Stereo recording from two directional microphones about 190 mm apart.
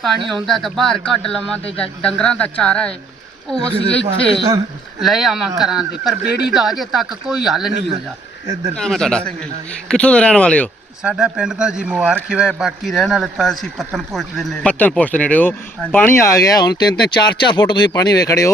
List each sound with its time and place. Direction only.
0.3 s speech: centre (ahead or behind)
3.5 s speech: 15° right (ahead or behind)
4.9 s speech: centre (ahead or behind)
8.7 s speech: 5° left (ahead or behind)
11.0 s speech: 5° right (ahead or behind); by 18.5 s 15° left (ahead or behind)